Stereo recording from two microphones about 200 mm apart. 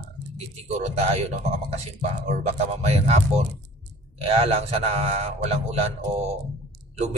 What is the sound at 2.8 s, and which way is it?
A man's voice, 30° right (ahead or behind).